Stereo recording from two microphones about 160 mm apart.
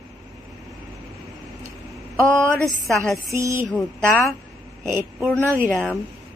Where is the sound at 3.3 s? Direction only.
15° right (ahead or behind).